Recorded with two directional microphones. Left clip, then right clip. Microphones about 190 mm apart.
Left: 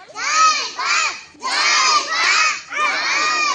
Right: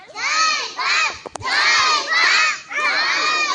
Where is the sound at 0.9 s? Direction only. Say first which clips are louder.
Even; 50° left (ahead or behind).